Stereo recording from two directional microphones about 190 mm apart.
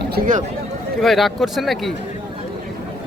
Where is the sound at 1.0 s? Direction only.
Centre (ahead or behind).